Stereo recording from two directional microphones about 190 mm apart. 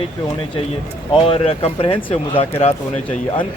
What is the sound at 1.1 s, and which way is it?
Speech, 30° left (ahead or behind).